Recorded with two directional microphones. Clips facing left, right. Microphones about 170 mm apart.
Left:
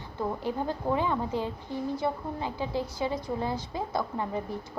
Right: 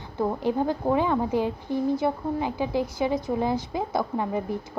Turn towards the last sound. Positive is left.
turn(degrees=-15)  # may be behind; listen again after turning